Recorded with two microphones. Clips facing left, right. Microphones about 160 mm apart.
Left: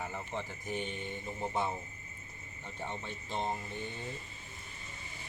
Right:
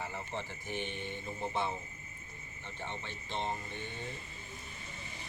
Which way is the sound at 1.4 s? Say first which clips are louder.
Left 1 dB; 10° left (ahead or behind).